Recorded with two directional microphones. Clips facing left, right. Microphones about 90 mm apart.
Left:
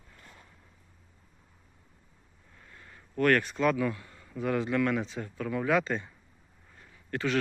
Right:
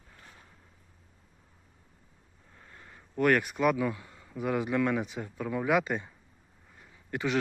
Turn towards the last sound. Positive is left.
turn(degrees=-15)  # may be behind; listen again after turning